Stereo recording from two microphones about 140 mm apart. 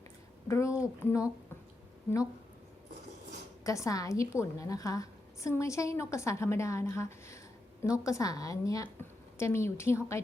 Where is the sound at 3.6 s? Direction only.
25° left (ahead or behind).